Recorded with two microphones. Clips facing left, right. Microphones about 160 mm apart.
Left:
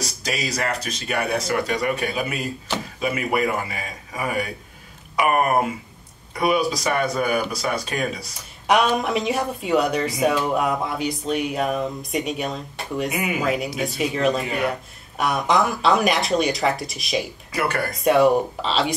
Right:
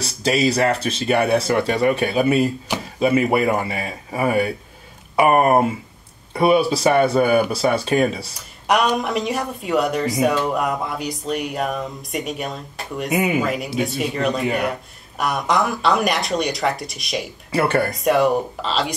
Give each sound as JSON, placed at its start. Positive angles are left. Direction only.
{"t": 0.0, "sound": "speech", "side_deg": -25}
{"t": 8.4, "sound": "a woman's voice", "side_deg": 0}
{"t": 17.5, "sound": "speech", "side_deg": -30}
{"t": 17.9, "sound": "a woman's voice", "side_deg": 0}